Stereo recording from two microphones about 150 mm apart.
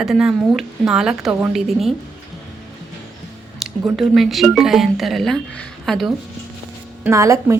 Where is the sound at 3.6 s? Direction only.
Centre (ahead or behind).